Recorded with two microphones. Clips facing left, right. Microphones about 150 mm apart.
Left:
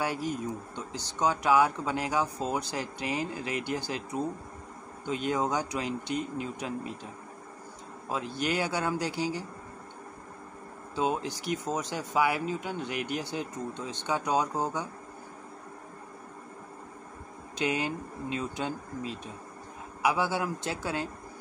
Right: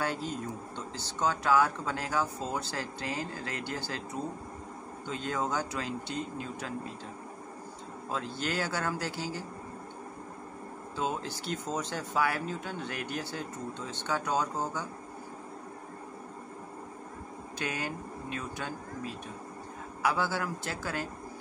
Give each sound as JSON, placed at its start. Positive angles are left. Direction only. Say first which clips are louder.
{"t": 0.0, "sound": "speech", "louder": "left 2 dB", "side_deg": 10}
{"t": 8.1, "sound": "speech", "louder": "left 3 dB", "side_deg": 15}
{"t": 11.0, "sound": "speech", "louder": "left 4 dB", "side_deg": 15}
{"t": 17.6, "sound": "speech", "louder": "left 6 dB", "side_deg": 20}